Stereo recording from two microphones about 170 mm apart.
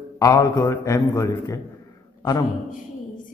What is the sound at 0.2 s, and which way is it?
A man's voice, 20° left (ahead or behind).